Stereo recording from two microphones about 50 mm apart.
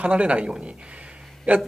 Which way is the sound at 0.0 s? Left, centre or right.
Right.